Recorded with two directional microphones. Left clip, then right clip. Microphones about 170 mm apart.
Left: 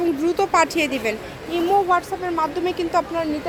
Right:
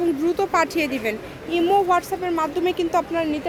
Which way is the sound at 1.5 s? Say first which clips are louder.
Even; 20° right (ahead or behind).